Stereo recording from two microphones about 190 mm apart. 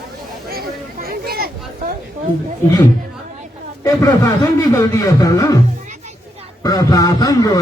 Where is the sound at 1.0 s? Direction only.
50° right (ahead or behind).